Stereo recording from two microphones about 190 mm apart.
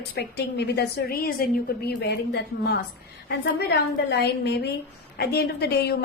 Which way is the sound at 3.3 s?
55° left (ahead or behind).